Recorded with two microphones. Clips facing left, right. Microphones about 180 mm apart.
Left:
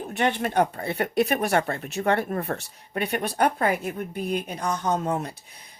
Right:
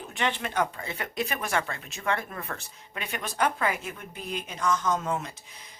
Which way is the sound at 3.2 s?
55° left (ahead or behind).